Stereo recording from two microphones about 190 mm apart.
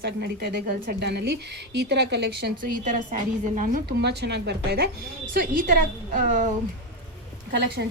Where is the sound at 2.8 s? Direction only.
40° right (ahead or behind).